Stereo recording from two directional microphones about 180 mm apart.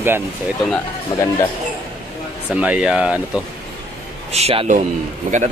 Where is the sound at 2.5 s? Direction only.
5° right (ahead or behind).